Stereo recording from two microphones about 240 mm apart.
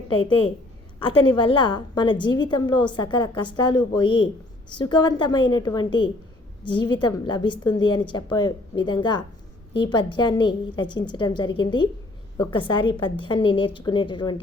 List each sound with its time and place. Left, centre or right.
0.9 s a woman's voice: left